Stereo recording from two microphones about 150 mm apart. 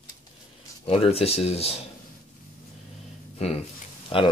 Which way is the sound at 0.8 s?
40° left (ahead or behind).